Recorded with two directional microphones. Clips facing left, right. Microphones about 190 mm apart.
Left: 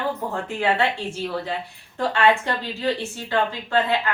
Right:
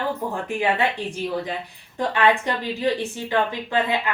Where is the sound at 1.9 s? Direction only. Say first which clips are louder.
Even; 15° right (ahead or behind).